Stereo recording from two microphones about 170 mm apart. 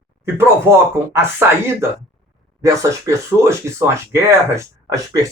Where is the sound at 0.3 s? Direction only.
15° right (ahead or behind).